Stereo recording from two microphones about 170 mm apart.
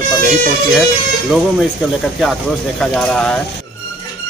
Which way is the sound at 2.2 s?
Centre (ahead or behind).